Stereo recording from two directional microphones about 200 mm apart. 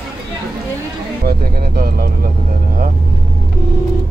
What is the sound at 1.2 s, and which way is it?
Speech, 50° right (ahead or behind).